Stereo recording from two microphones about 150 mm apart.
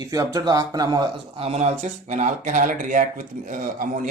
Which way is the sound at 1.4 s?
45° right (ahead or behind).